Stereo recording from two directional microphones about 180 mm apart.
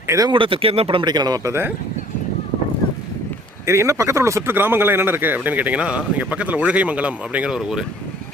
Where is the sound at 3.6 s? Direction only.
15° right (ahead or behind).